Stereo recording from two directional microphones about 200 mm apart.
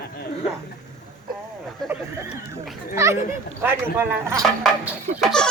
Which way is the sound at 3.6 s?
10° right (ahead or behind).